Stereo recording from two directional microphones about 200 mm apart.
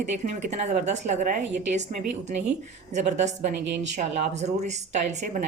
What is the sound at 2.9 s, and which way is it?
A woman's voice, 35° right (ahead or behind).